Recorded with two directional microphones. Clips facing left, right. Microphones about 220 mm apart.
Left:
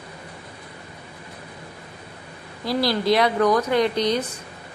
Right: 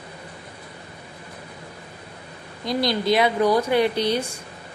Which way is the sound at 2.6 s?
5° left (ahead or behind).